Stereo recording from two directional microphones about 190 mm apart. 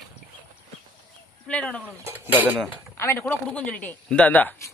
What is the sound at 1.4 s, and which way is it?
Speech, 5° left (ahead or behind).